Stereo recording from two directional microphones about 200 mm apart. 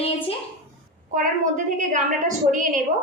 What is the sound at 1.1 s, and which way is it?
A woman's voice, 40° right (ahead or behind).